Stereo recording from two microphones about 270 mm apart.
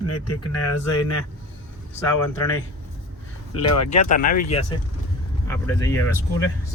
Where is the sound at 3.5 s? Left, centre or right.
Left.